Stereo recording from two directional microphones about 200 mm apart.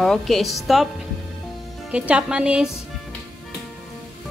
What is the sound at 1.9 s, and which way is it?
Music, 5° right (ahead or behind).